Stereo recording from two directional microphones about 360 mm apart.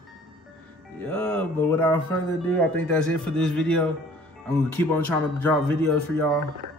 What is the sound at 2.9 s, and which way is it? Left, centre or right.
Speech, centre.